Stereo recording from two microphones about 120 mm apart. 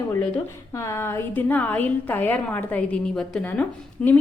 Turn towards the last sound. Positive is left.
turn(degrees=10)  # may be behind; listen again after turning